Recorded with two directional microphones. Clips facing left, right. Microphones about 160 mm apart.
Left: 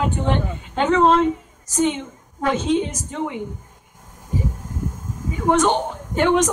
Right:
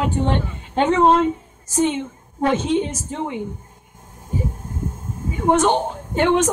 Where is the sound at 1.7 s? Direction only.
30° right (ahead or behind).